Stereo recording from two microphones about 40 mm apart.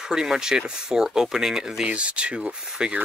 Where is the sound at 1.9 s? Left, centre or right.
Right.